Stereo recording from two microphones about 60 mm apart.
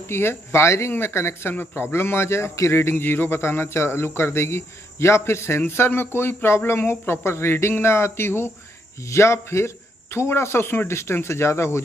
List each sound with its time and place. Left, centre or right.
0.1 s speech: left
1.5 s speech: left
1.8 s speech: left